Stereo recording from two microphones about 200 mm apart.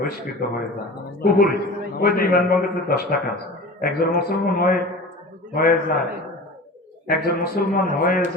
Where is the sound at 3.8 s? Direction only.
45° left (ahead or behind).